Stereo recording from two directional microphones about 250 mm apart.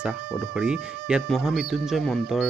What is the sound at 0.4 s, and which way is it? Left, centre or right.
Speech, centre.